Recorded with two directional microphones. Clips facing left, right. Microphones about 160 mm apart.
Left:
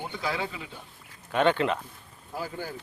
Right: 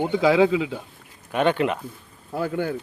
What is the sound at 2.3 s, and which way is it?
Speech, 60° right (ahead or behind).